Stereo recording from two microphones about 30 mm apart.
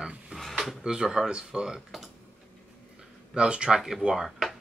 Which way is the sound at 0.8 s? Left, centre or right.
Right.